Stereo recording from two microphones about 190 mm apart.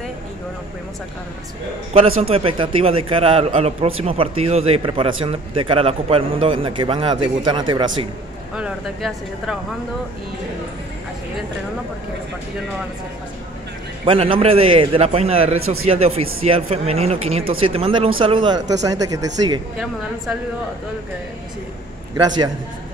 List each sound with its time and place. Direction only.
2.2 s speech: 30° right (ahead or behind)
8.5 s speech: 5° right (ahead or behind)
14.0 s speech: 30° right (ahead or behind)
22.1 s speech: 20° right (ahead or behind)